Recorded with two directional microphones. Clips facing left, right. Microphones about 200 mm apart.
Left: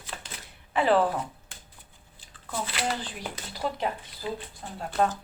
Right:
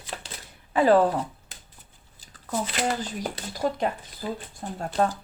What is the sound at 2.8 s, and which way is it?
Speech, 45° right (ahead or behind).